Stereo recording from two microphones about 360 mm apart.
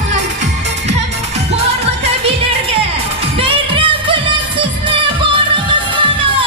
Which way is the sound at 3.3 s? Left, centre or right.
Centre.